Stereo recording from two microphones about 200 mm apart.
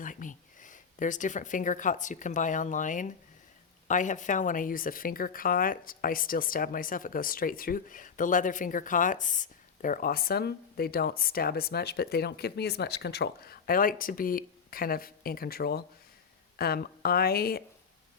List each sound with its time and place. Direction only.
0.0 s speech: 40° left (ahead or behind)